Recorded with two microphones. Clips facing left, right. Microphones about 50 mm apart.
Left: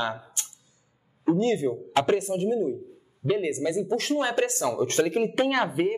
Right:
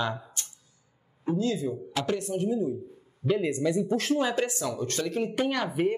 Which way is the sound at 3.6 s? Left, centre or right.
Centre.